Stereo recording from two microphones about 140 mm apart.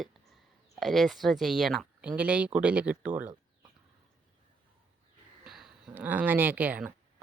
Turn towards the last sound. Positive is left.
turn(degrees=-10)  # may be behind; listen again after turning